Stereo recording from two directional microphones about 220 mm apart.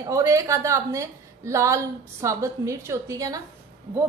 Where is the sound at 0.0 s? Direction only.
15° right (ahead or behind).